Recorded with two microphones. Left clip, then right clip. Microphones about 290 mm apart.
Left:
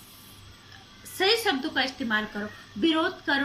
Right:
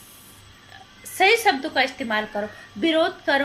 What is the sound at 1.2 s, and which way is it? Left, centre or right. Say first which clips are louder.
A woman's voice: right 6 dB; right.